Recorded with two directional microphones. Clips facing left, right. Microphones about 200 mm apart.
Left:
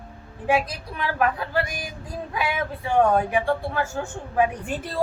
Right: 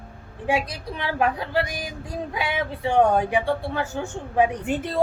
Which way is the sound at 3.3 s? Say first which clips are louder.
Even; 20° right (ahead or behind).